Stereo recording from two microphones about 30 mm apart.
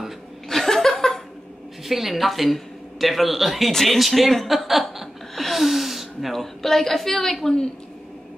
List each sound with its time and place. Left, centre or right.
0.5 s chuckle: centre
1.9 s speech: centre
4.5 s chuckle: centre
5.3 s gasp: centre
6.3 s a woman's voice: centre